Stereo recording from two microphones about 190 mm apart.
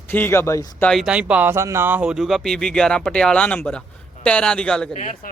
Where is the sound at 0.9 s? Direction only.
Centre (ahead or behind).